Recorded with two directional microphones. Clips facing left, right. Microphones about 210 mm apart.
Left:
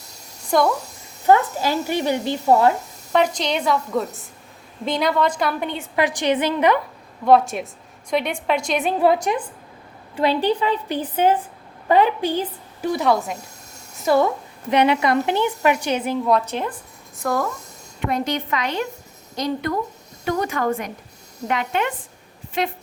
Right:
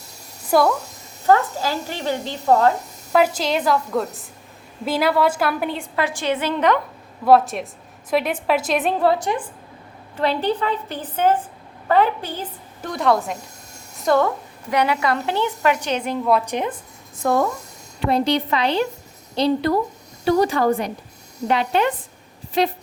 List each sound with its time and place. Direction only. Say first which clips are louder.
0.4 s speech: right 1 dB; 5° right (ahead or behind)
1.3 s a woman's voice: left 1 dB; 15° left (ahead or behind)
3.1 s a woman's voice: right 2 dB; 5° right (ahead or behind)
6.0 s a woman's voice: left 3 dB; 15° left (ahead or behind)
7.3 s a woman's voice: right 1 dB; centre (ahead or behind)
9.0 s a woman's voice: left 1 dB; 15° left (ahead or behind)
12.8 s a woman's voice: even; 5° left (ahead or behind)
13.9 s a sound: even; centre (ahead or behind)
14.7 s a woman's voice: left 3 dB; 20° left (ahead or behind); by 16.3 s 5° left (ahead or behind)
16.3 s a woman's voice: right 3 dB; 15° right (ahead or behind); by 22.7 s 35° right (ahead or behind)